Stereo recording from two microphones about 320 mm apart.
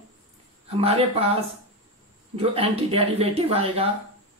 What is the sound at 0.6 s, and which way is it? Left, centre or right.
Speech, centre.